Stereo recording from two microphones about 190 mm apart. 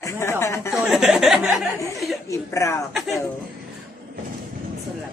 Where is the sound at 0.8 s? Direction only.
Centre (ahead or behind).